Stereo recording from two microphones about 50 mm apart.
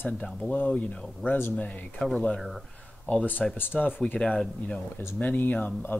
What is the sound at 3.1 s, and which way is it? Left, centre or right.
Speech, left.